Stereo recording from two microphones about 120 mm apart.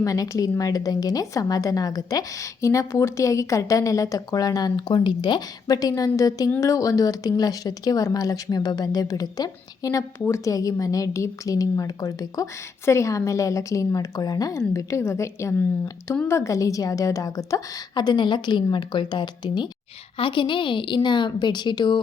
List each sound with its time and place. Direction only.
0.0 s speech: 30° left (ahead or behind)